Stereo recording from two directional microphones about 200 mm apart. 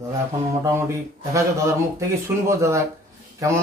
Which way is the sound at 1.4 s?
15° right (ahead or behind).